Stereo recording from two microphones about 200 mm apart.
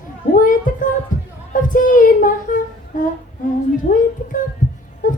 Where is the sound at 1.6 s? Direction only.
40° left (ahead or behind).